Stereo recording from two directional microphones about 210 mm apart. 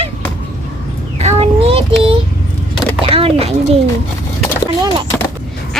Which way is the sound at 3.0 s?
25° right (ahead or behind).